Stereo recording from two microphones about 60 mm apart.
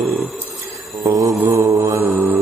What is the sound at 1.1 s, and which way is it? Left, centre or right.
Mantra, right.